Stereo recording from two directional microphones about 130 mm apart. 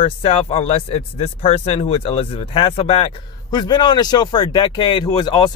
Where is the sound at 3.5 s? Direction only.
35° left (ahead or behind).